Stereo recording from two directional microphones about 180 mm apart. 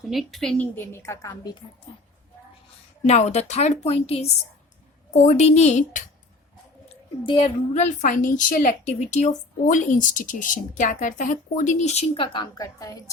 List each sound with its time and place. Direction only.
0.0 s a woman's voice: centre (ahead or behind); by 1.5 s 20° left (ahead or behind)
3.1 s a woman's voice: 40° left (ahead or behind)
6.8 s a sound: 30° left (ahead or behind)
7.7 s a woman's voice: 45° left (ahead or behind); by 13.0 s 20° left (ahead or behind)